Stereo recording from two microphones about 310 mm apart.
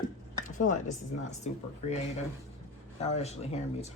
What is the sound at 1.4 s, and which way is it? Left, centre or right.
Speech, left.